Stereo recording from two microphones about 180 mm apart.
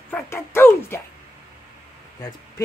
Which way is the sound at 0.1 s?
15° left (ahead or behind).